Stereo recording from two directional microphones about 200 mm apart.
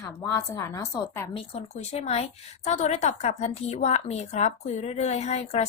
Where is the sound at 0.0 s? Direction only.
15° left (ahead or behind).